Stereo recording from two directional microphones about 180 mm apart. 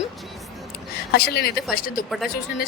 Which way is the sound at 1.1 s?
60° left (ahead or behind).